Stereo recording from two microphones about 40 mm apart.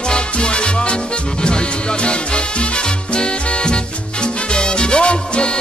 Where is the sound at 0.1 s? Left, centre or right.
Left.